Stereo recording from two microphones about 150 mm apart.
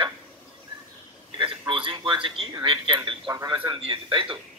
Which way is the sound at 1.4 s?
35° right (ahead or behind).